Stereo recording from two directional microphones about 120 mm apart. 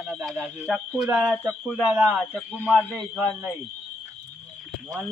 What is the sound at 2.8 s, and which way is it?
Speech, 15° left (ahead or behind).